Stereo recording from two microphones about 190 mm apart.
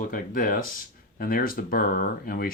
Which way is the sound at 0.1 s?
45° left (ahead or behind).